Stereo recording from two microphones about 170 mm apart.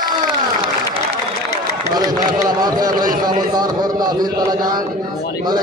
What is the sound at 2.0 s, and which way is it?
A man's voice, 25° right (ahead or behind).